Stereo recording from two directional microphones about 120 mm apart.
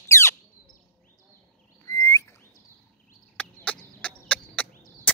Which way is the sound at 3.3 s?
10° left (ahead or behind).